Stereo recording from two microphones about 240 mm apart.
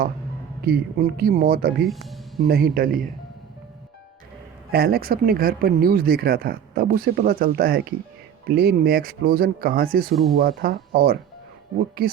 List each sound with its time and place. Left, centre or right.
0.6 s speech: right
1.9 s speech: centre
2.5 s speech: right
4.7 s speech: right